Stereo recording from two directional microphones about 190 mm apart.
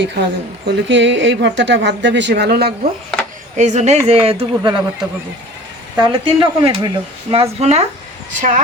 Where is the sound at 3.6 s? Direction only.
40° right (ahead or behind).